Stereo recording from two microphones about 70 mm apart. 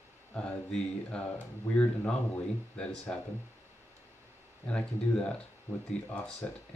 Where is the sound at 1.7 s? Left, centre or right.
Centre.